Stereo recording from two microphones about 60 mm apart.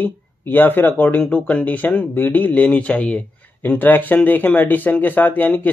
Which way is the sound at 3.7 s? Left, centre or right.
Left.